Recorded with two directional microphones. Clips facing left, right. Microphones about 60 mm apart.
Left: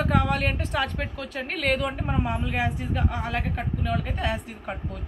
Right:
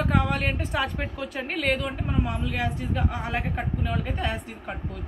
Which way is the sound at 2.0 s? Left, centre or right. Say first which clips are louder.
Left 1 dB; centre.